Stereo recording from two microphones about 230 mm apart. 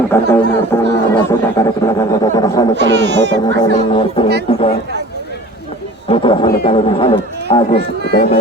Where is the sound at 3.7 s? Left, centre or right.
Left.